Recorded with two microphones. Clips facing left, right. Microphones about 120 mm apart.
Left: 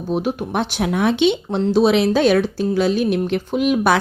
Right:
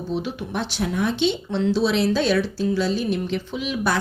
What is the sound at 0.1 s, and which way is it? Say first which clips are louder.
Speech: left 7 dB; 50° left (ahead or behind).